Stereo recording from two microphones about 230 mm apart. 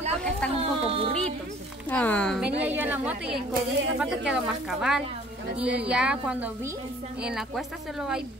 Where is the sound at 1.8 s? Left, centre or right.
Centre.